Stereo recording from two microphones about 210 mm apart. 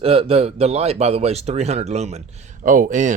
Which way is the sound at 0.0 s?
30° right (ahead or behind).